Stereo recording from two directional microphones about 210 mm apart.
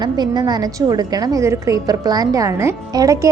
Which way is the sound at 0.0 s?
20° right (ahead or behind).